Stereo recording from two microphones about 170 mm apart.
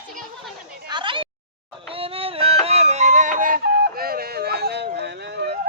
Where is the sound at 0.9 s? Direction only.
30° right (ahead or behind).